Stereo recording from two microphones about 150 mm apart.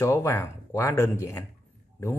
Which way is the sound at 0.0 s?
20° left (ahead or behind).